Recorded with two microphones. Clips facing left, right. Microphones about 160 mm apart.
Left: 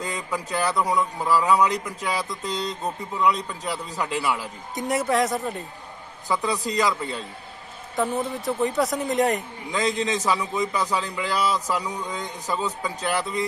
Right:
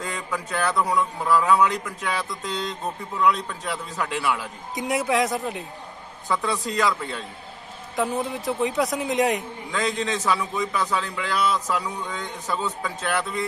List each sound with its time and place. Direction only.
0.0 s a man's voice: 15° left (ahead or behind)
2.5 s a sound: 40° left (ahead or behind)
3.2 s a man's voice: 15° left (ahead or behind)
4.7 s a man's voice: centre (ahead or behind)
6.2 s a man's voice: 15° left (ahead or behind)
7.9 s a man's voice: centre (ahead or behind)
10.1 s a man's voice: 15° left (ahead or behind)
11.3 s a sound: 35° left (ahead or behind)
11.8 s a man's voice: 15° left (ahead or behind)
13.1 s a sound: 35° left (ahead or behind)